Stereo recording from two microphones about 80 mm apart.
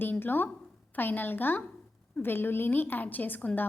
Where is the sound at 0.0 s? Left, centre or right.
Left.